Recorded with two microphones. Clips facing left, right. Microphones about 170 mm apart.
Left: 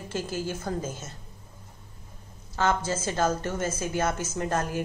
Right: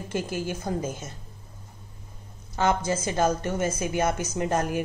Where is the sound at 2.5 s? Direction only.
15° right (ahead or behind).